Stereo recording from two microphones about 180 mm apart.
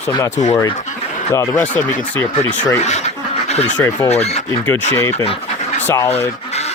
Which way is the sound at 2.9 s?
40° left (ahead or behind).